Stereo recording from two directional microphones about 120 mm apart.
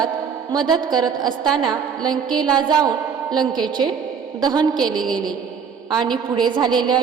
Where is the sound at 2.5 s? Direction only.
35° right (ahead or behind).